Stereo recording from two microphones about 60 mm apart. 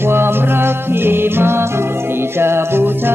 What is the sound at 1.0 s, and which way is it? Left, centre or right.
Music, right.